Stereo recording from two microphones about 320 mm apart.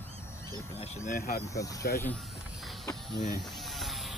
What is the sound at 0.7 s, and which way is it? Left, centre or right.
Speech, centre.